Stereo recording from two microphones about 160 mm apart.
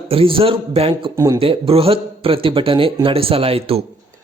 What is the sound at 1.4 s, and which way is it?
A man's voice, 35° right (ahead or behind).